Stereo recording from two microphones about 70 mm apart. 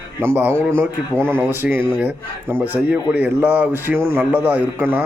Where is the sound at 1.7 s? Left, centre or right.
Right.